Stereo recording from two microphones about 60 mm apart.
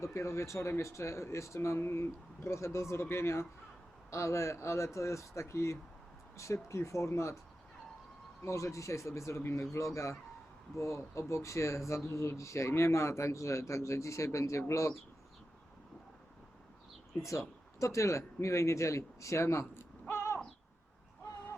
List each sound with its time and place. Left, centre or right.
0.0 s speech: left
8.4 s speech: left
9.4 s speech: left
9.7 s speech: left
17.2 s speech: left
18.2 s speech: left
18.5 s speech: left